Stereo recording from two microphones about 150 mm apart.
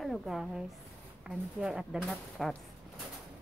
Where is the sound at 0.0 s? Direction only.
Centre (ahead or behind).